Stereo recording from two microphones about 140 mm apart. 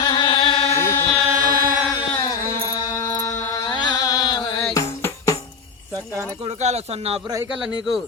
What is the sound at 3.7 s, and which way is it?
Chant, 30° left (ahead or behind).